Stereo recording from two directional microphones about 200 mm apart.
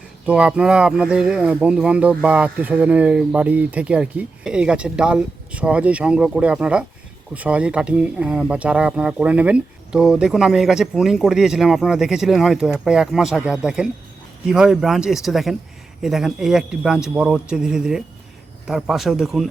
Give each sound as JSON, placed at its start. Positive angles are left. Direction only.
{"t": 0.3, "sound": "speech", "side_deg": -5}